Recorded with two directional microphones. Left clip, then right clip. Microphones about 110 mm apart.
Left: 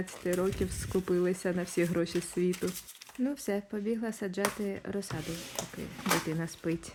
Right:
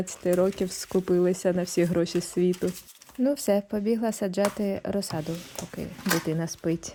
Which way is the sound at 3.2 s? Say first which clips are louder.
Right 9 dB; 70° right (ahead or behind).